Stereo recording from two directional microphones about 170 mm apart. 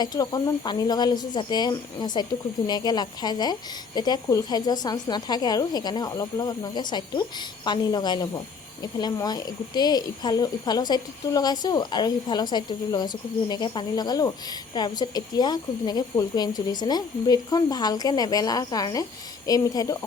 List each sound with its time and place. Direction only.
0.0 s speech: 20° left (ahead or behind)